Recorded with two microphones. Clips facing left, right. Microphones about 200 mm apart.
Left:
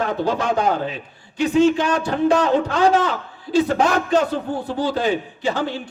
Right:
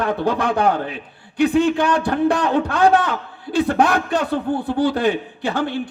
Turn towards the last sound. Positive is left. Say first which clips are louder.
# even
turn(degrees=-55)  # may be behind; listen again after turning